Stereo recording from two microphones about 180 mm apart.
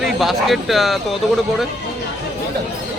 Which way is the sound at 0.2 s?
Centre (ahead or behind).